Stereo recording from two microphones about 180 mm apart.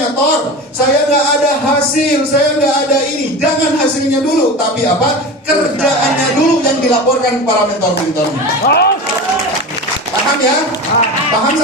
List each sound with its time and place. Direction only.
8.6 s speech: 60° left (ahead or behind)